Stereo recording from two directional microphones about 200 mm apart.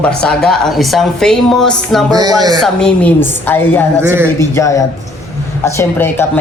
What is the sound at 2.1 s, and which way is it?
Speech, 20° right (ahead or behind).